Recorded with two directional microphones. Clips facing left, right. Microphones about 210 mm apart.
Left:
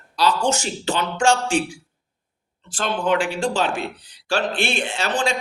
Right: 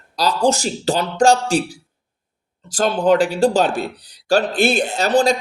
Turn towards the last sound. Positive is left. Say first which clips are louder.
# right 7 dB
turn(degrees=-40)  # may be behind; listen again after turning